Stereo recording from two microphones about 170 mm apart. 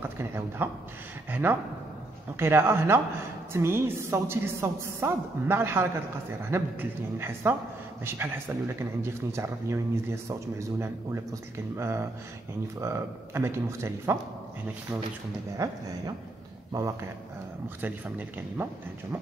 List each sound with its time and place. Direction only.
0.0 s a woman's voice: 15° right (ahead or behind)
15.6 s a woman's voice: 20° right (ahead or behind)